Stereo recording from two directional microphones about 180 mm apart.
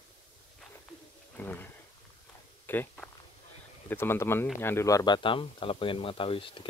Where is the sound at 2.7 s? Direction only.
5° left (ahead or behind).